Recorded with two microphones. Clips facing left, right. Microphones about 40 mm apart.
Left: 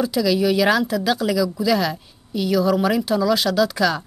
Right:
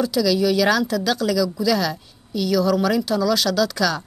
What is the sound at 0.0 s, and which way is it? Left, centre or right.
Speech, centre.